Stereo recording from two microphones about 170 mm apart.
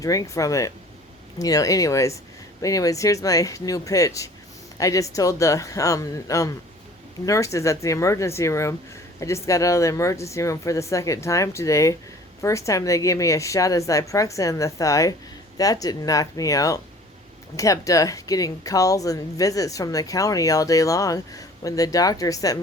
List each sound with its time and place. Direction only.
0.0 s a woman's voice: 20° left (ahead or behind)